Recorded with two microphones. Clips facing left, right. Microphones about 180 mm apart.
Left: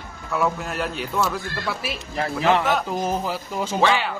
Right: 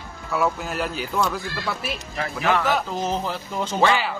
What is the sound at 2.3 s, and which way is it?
Speech, 25° left (ahead or behind).